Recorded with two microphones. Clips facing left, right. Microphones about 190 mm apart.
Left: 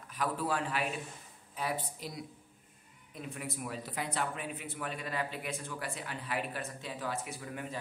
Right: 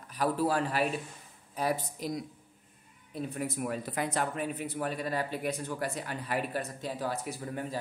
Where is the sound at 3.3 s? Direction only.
45° right (ahead or behind).